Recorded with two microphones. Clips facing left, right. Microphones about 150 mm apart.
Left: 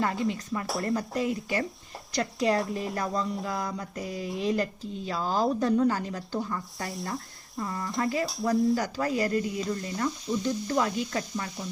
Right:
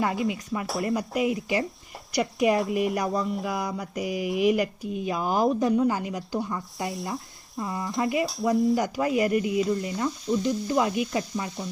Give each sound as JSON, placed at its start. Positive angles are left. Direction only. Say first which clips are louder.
{"t": 0.2, "sound": "sizzle", "louder": "right 2 dB", "side_deg": -10}
{"t": 0.7, "sound": "stir", "louder": "right 2 dB", "side_deg": 0}
{"t": 0.9, "sound": "sizzle", "louder": "right 3 dB", "side_deg": -15}
{"t": 2.1, "sound": "speech", "louder": "right 3 dB", "side_deg": -20}
{"t": 2.9, "sound": "sizzle", "louder": "right 3 dB", "side_deg": -10}
{"t": 6.9, "sound": "speech", "louder": "right 2 dB", "side_deg": 0}
{"t": 8.0, "sound": "speech", "louder": "right 3 dB", "side_deg": -20}
{"t": 8.7, "sound": "sizzle", "louder": "right 3 dB", "side_deg": -20}